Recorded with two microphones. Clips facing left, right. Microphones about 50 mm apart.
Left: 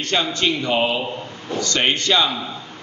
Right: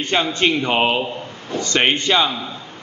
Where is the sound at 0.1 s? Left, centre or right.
Right.